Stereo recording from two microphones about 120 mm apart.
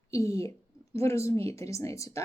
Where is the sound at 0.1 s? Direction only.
25° left (ahead or behind).